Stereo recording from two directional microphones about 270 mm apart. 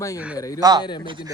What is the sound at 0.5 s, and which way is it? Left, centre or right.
Speech, centre.